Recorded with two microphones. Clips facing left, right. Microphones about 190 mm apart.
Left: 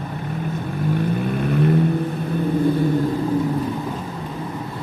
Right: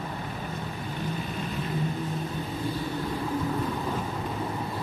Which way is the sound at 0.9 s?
60° left (ahead or behind).